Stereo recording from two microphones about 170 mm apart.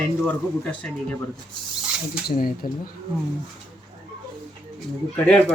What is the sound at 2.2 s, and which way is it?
Speech, 60° left (ahead or behind).